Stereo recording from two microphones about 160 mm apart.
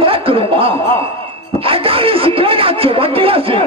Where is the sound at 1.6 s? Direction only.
35° right (ahead or behind).